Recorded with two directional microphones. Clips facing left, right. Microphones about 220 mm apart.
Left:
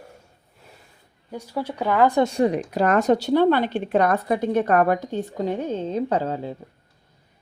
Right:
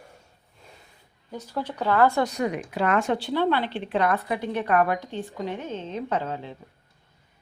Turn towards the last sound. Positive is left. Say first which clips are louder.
# left 5 dB
turn(degrees=35)  # may be behind; listen again after turning